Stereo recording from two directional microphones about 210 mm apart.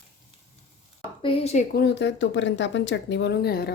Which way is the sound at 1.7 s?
50° left (ahead or behind).